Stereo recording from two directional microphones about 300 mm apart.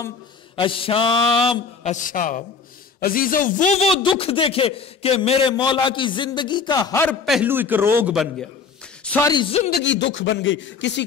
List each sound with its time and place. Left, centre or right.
0.6 s a man's voice: centre
9.7 s speech: left